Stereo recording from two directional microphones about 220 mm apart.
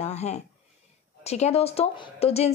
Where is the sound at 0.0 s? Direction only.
30° left (ahead or behind).